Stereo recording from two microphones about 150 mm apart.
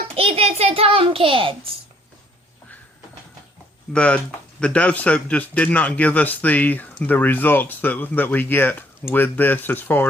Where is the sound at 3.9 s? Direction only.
5° left (ahead or behind).